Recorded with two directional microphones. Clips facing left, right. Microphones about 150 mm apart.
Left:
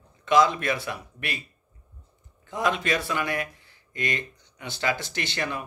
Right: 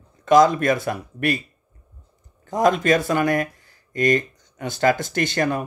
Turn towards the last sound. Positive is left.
turn(degrees=-45)  # may be behind; listen again after turning